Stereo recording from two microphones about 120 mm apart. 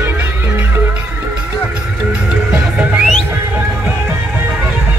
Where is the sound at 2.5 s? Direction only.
15° right (ahead or behind).